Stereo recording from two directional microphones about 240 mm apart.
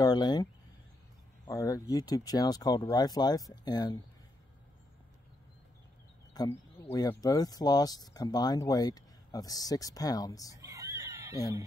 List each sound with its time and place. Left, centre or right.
0.0 s speech: centre
1.5 s speech: centre
6.3 s speech: centre
10.5 s a sound: centre